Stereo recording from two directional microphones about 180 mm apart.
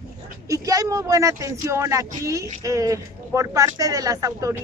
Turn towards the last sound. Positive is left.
turn(degrees=-20)  # may be behind; listen again after turning